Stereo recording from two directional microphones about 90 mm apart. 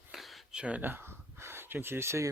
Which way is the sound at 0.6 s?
20° right (ahead or behind).